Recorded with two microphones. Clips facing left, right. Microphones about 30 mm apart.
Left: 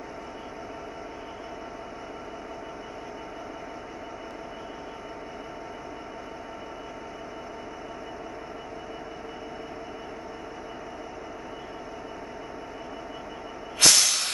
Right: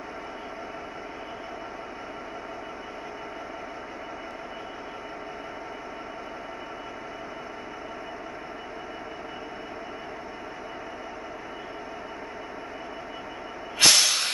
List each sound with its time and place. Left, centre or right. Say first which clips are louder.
13.7 s hiss: right 1 dB; centre